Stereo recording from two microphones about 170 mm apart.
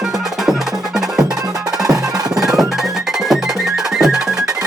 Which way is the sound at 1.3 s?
20° right (ahead or behind).